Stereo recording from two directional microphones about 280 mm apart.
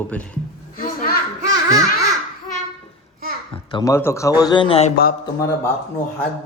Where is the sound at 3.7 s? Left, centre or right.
Centre.